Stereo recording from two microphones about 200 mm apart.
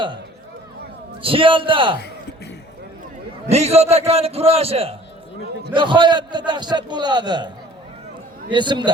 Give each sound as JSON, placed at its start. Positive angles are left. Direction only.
{"t": 1.2, "sound": "a man's voice", "side_deg": -25}
{"t": 3.5, "sound": "a man's voice", "side_deg": -30}